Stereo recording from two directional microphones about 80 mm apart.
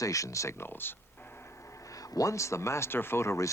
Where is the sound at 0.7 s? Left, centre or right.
Left.